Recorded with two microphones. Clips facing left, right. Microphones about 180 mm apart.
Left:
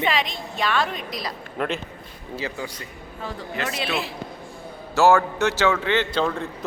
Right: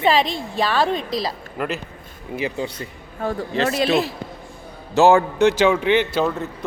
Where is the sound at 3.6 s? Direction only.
40° right (ahead or behind).